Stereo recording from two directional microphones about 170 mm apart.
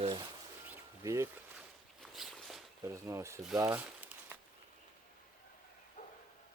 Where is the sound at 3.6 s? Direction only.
10° right (ahead or behind).